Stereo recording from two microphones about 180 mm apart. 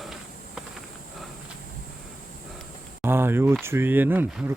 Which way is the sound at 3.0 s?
15° right (ahead or behind).